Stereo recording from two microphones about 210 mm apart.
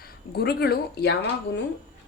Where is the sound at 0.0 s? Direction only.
50° left (ahead or behind).